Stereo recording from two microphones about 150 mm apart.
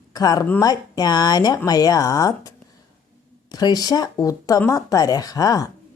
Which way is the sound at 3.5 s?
25° left (ahead or behind).